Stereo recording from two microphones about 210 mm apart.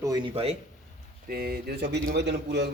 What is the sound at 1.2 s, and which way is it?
Speech, 45° right (ahead or behind).